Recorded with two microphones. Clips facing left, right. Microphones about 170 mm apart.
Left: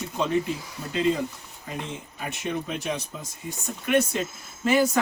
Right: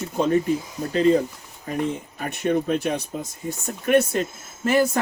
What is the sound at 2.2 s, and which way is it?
Speech, 55° right (ahead or behind).